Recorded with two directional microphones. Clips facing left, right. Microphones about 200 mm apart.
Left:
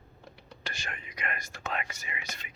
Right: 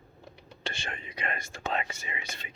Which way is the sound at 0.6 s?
30° right (ahead or behind).